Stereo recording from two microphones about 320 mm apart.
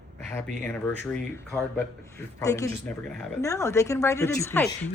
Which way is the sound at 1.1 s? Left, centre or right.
Centre.